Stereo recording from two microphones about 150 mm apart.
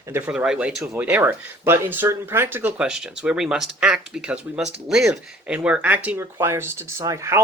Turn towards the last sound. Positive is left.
turn(degrees=-20)  # may be behind; listen again after turning